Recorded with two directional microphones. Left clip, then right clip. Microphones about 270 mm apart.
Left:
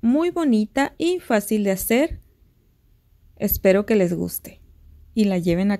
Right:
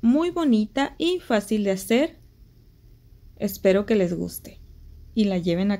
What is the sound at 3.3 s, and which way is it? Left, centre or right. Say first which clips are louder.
Speech: left 3 dB; left.